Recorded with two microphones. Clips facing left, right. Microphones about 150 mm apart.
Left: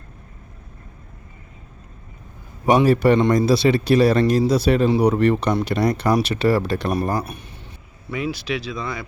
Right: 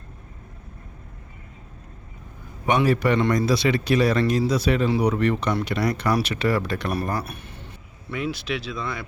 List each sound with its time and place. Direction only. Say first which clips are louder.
2.6 s a man's voice: left 5 dB; 35° left (ahead or behind)
7.3 s a sound: left 2 dB; 15° left (ahead or behind)
8.1 s speech: left 2 dB; centre (ahead or behind)